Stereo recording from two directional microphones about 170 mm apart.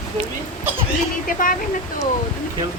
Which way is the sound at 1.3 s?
55° left (ahead or behind).